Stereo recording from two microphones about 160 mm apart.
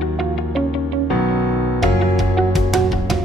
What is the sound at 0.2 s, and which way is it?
Music, centre (ahead or behind).